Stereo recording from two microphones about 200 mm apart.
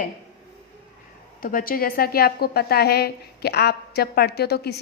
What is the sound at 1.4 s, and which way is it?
A woman's voice, 45° left (ahead or behind).